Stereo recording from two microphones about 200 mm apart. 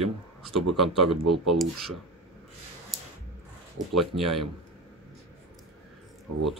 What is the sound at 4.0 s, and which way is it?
Speech, centre (ahead or behind).